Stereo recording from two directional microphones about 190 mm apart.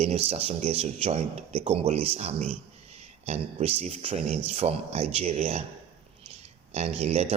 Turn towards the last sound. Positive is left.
turn(degrees=-35)  # may be behind; listen again after turning